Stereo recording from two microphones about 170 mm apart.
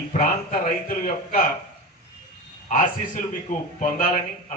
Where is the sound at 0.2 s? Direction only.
55° left (ahead or behind).